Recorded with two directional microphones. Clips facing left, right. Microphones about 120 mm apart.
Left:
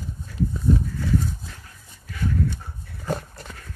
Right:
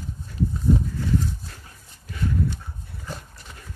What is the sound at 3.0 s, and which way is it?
Dog, 50° left (ahead or behind).